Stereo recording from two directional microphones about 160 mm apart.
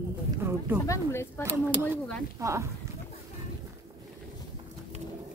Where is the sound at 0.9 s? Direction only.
15° left (ahead or behind).